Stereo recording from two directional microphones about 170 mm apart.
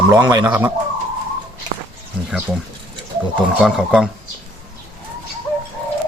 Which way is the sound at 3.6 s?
5° right (ahead or behind).